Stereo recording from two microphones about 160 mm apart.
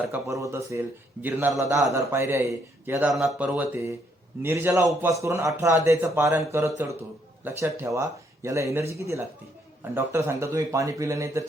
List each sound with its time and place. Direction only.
0.1 s a man's voice: 20° right (ahead or behind)
3.1 s a man's voice: centre (ahead or behind); by 11.4 s 20° right (ahead or behind)